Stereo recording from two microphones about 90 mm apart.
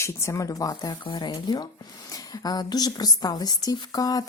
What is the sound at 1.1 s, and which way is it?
A woman's voice, 50° left (ahead or behind).